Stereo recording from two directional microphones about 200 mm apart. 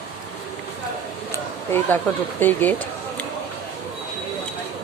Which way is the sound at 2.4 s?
10° left (ahead or behind).